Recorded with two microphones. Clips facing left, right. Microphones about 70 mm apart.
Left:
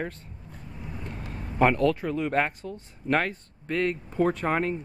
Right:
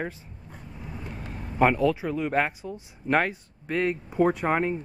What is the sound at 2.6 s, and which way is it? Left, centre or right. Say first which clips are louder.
Speech: even; centre.